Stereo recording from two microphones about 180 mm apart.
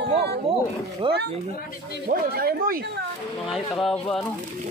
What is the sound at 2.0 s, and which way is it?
Speech, 60° right (ahead or behind).